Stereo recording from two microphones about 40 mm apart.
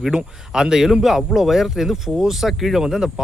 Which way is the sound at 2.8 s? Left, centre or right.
Centre.